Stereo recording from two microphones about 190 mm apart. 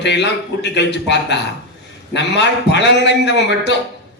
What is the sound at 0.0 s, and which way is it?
A man's voice, 65° left (ahead or behind).